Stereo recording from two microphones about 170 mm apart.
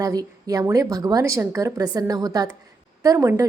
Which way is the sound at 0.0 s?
20° right (ahead or behind).